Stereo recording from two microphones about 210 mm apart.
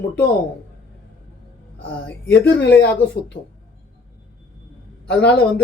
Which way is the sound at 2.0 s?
55° left (ahead or behind).